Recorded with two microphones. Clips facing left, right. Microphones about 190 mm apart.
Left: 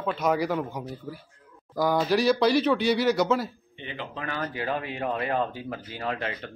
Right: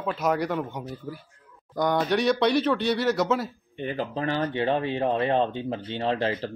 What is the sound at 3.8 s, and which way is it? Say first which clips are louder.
Speech: right 8 dB; 45° right (ahead or behind).